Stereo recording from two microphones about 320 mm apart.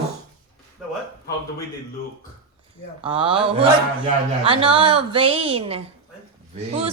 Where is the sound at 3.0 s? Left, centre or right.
Centre.